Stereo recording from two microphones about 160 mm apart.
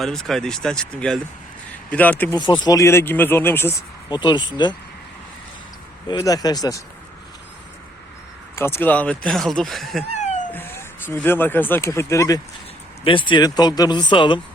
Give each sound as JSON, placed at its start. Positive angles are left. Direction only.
{"t": 0.0, "sound": "speech", "side_deg": 0}
{"t": 2.3, "sound": "speech", "side_deg": 30}
{"t": 4.1, "sound": "speech", "side_deg": 30}
{"t": 6.1, "sound": "speech", "side_deg": 25}
{"t": 8.5, "sound": "speech", "side_deg": 15}
{"t": 10.1, "sound": "a sound", "side_deg": 45}
{"t": 10.5, "sound": "speech", "side_deg": 15}
{"t": 13.1, "sound": "speech", "side_deg": 30}